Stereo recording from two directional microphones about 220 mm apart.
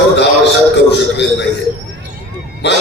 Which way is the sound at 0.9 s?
50° left (ahead or behind).